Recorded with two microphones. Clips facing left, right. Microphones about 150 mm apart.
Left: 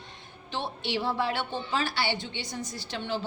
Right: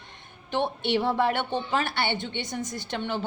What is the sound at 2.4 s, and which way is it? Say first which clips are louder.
Speech: right 4 dB; 20° right (ahead or behind).